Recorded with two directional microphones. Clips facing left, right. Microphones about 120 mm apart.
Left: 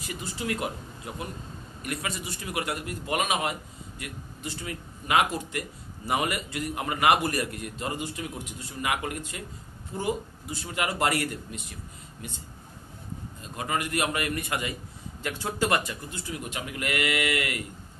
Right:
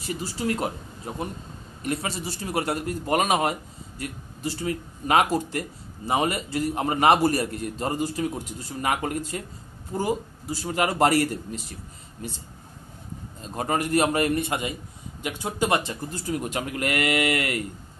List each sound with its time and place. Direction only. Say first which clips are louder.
0.0 s a man's voice: right 5 dB; 35° right (ahead or behind)
6.0 s a man's voice: right 4 dB; 30° right (ahead or behind)
13.4 s a man's voice: right 5 dB; 35° right (ahead or behind)